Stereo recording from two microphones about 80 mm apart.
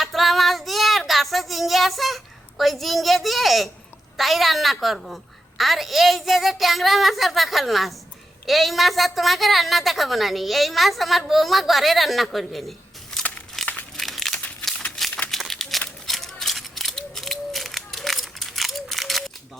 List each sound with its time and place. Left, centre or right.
0.0 s child singing: centre
4.2 s a woman's voice: centre
13.6 s crumpling: centre
14.8 s a sound: centre
15.3 s crumpling: centre
16.0 s a sound: centre